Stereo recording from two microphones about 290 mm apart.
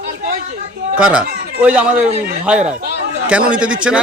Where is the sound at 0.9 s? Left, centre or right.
Centre.